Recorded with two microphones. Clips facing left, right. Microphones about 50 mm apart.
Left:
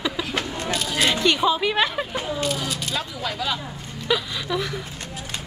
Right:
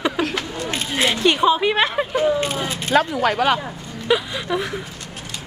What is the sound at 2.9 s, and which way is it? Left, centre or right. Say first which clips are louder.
Speech: right 11 dB; right.